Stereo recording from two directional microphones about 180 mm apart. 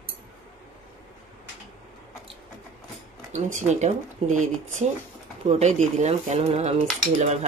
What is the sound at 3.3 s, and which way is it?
Speech, 40° right (ahead or behind).